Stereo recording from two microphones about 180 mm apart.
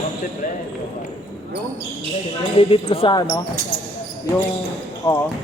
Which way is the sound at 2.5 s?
30° left (ahead or behind).